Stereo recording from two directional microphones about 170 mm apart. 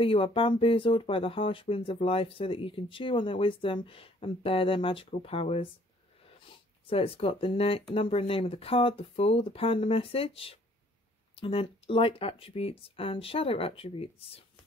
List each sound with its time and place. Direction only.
0.0 s speech: 30° left (ahead or behind)
6.9 s speech: 35° left (ahead or behind)